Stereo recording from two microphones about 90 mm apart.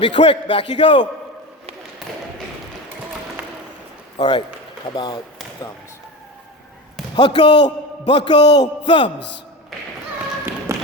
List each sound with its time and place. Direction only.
0.0 s a man's voice: 80° left; by 1.0 s 60° left (ahead or behind)
3.4 s a sound: 15° right (ahead or behind)
4.2 s a man's voice: 60° left (ahead or behind)
4.9 s speech: 50° left (ahead or behind)
7.2 s a man's voice: 60° left (ahead or behind)
10.7 s tap: 35° right (ahead or behind)